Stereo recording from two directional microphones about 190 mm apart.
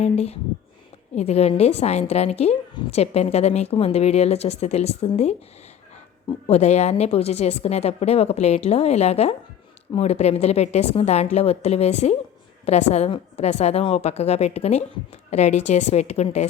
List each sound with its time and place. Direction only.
0.0 s a woman's voice: 35° left (ahead or behind)
6.5 s a woman's voice: 35° left (ahead or behind)